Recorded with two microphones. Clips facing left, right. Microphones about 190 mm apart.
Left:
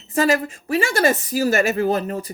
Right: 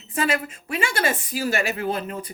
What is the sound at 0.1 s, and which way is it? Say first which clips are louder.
A woman's voice: left 6 dB; 40° left (ahead or behind).